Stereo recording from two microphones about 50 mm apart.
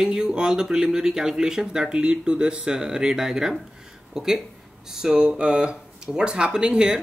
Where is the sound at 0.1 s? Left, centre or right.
Centre.